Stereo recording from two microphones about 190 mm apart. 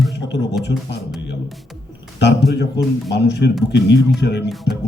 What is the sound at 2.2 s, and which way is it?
A man's voice, 60° left (ahead or behind).